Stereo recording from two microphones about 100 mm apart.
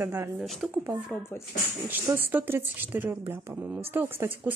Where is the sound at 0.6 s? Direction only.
5° right (ahead or behind).